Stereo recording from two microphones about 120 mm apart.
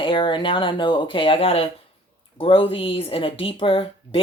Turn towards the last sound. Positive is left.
turn(degrees=50)  # may be behind; listen again after turning